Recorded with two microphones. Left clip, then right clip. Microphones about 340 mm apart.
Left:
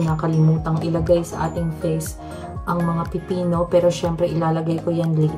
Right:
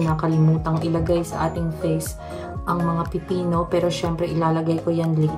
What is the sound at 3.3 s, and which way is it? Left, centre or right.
Speech, centre.